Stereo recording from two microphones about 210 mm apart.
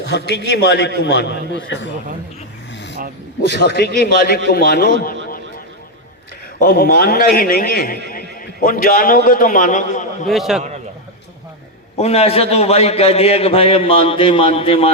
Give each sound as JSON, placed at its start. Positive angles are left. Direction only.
{"t": 0.1, "sound": "a man's voice", "side_deg": 55}
{"t": 2.7, "sound": "vehicle", "side_deg": 55}
{"t": 3.5, "sound": "a man's voice", "side_deg": 50}
{"t": 6.6, "sound": "a man's voice", "side_deg": 45}
{"t": 10.2, "sound": "a man's voice", "side_deg": 0}
{"t": 11.9, "sound": "a man's voice", "side_deg": 30}